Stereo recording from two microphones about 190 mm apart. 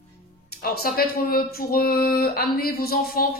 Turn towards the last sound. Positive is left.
turn(degrees=50)  # may be behind; listen again after turning